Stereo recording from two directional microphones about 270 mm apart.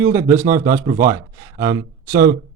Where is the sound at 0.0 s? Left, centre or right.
Centre.